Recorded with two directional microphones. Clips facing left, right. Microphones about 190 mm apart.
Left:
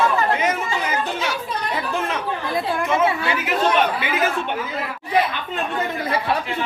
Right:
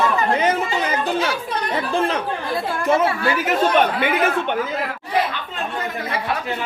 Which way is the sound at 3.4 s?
50° right (ahead or behind).